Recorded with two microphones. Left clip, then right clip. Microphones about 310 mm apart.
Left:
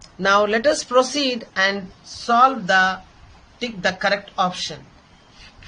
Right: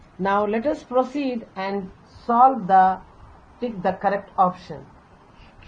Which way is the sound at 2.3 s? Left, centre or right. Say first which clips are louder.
Even; left.